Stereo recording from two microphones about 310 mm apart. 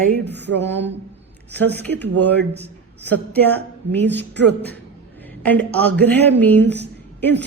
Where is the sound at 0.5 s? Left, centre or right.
Right.